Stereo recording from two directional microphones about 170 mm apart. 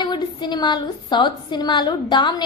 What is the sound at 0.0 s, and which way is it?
A woman's voice, 25° left (ahead or behind).